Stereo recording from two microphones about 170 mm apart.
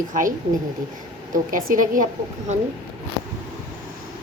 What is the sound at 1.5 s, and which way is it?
Speech, 50° right (ahead or behind).